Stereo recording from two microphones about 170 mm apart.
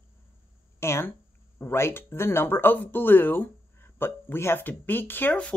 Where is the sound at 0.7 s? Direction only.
15° left (ahead or behind).